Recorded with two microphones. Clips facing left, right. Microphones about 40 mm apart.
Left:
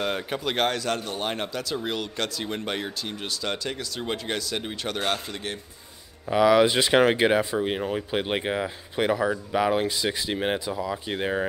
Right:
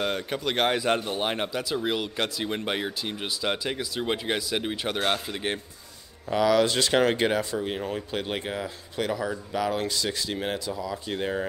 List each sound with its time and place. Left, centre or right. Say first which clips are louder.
0.0 s a man's voice: even; centre
0.7 s speech: right 2 dB; centre
6.3 s speech: left 3 dB; centre